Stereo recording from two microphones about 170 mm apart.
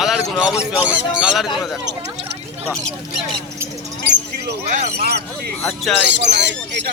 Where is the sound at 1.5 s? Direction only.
Centre (ahead or behind).